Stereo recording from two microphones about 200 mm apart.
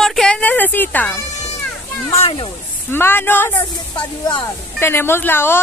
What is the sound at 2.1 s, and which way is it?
Speech, 25° left (ahead or behind).